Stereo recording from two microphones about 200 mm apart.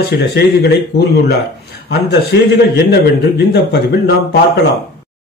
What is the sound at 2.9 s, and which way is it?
Speech, 55° left (ahead or behind).